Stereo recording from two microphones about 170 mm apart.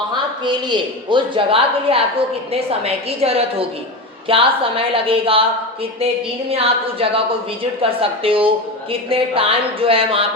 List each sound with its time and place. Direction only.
0.4 s a woman's voice: 30° right (ahead or behind)
6.5 s a woman's voice: 35° right (ahead or behind)